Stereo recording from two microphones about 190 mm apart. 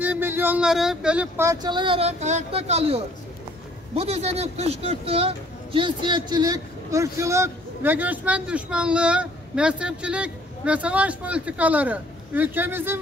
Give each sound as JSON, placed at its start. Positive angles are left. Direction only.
{"t": 0.0, "sound": "speech", "side_deg": -10}